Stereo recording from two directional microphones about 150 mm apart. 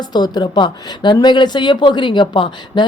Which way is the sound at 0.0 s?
30° left (ahead or behind).